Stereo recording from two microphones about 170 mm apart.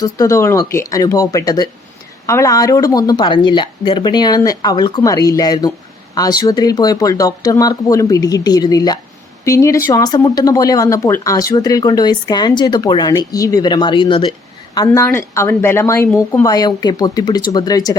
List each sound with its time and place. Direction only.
0.0 s speech: 20° left (ahead or behind)